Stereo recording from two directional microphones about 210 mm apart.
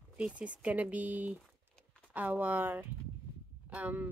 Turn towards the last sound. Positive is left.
turn(degrees=-5)  # may be behind; listen again after turning